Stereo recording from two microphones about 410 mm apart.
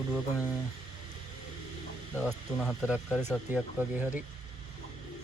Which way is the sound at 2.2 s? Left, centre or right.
Centre.